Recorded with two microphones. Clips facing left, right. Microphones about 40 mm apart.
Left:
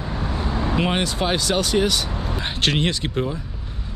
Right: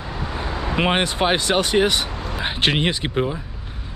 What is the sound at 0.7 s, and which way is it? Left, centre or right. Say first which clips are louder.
Speech: right 4 dB; right.